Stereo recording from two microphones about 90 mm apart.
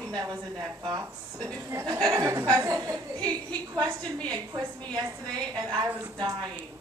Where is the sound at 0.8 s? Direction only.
50° right (ahead or behind).